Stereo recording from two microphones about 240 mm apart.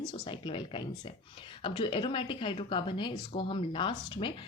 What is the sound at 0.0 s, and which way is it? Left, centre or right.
A woman's voice, centre.